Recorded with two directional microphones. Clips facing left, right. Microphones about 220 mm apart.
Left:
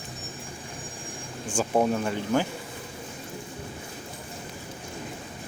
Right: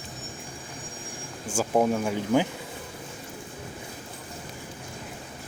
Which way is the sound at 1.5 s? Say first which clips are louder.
Right 1 dB; 5° right (ahead or behind).